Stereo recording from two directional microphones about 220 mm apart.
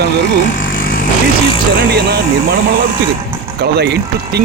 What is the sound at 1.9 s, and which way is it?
Speech, 45° right (ahead or behind).